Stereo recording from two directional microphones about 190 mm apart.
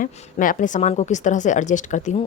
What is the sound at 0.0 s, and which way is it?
Speech, 45° left (ahead or behind).